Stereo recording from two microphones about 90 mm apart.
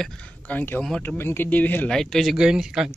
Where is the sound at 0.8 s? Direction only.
10° left (ahead or behind).